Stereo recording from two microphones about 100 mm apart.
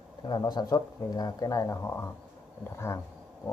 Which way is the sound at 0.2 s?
45° left (ahead or behind).